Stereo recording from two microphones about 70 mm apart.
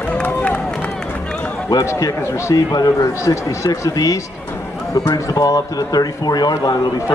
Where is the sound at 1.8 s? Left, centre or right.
Left.